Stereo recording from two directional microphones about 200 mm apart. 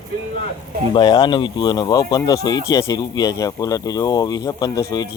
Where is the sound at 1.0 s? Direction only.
20° left (ahead or behind).